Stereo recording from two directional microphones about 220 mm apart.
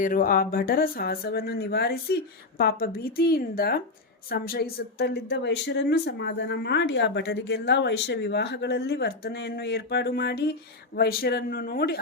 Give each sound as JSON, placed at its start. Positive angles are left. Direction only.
{"t": 0.0, "sound": "speech", "side_deg": 40}